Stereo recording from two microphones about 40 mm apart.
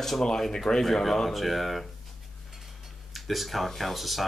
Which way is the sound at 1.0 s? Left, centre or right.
Centre.